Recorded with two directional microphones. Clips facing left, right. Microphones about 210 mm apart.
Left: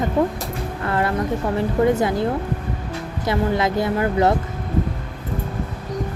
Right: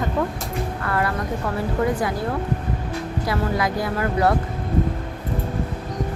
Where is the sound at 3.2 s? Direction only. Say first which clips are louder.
Left 4 dB; 25° left (ahead or behind).